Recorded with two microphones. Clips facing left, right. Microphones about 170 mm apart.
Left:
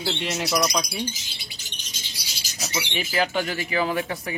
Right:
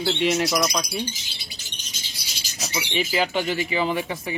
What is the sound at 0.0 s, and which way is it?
Speech, centre (ahead or behind).